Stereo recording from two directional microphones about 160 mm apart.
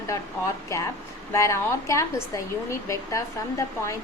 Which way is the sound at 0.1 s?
20° left (ahead or behind).